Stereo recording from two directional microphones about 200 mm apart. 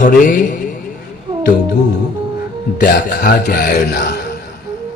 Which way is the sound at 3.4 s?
50° left (ahead or behind).